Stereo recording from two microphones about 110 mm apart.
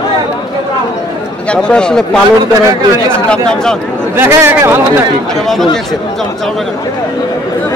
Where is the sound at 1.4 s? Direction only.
10° left (ahead or behind).